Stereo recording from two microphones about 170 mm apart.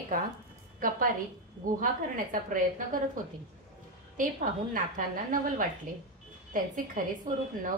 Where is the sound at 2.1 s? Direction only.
50° right (ahead or behind).